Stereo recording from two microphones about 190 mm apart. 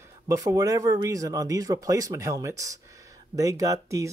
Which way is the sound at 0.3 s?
15° right (ahead or behind).